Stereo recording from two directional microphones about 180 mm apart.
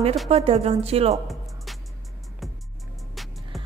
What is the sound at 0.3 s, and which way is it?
Speech, 35° right (ahead or behind).